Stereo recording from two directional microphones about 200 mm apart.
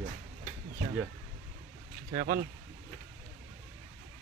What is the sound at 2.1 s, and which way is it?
Speech, 35° right (ahead or behind).